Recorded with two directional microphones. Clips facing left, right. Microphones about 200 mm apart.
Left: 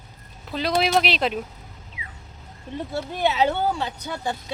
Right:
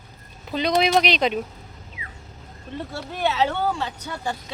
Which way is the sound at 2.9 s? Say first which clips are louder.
Left 2 dB; 15° left (ahead or behind).